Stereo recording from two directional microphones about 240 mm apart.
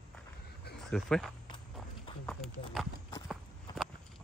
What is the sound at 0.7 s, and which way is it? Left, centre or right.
Speech, centre.